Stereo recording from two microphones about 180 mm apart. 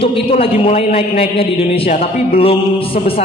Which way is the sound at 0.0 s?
30° left (ahead or behind).